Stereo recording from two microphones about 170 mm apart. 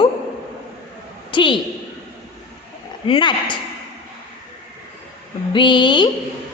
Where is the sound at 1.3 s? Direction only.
30° left (ahead or behind).